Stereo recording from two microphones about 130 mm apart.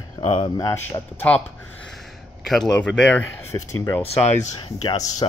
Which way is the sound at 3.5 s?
30° left (ahead or behind).